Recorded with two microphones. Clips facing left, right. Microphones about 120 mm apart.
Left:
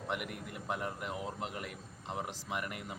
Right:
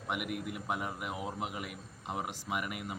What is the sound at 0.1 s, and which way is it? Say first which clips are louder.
Speech: right 4 dB; 10° right (ahead or behind).